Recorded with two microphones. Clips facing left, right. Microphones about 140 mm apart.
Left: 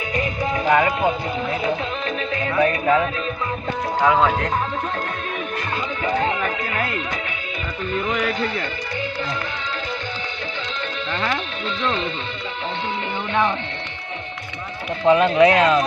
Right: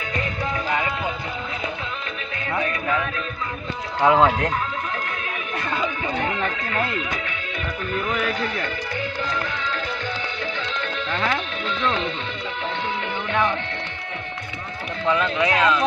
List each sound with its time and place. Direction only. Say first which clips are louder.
0.6 s music: left 9 dB; 50° left (ahead or behind)
2.6 s speech: left 8 dB; 35° left (ahead or behind)
4.0 s speech: right 1 dB; 30° right (ahead or behind)
8.0 s speech: left 2 dB; 15° left (ahead or behind)
15.0 s speech: left 8 dB; 25° left (ahead or behind)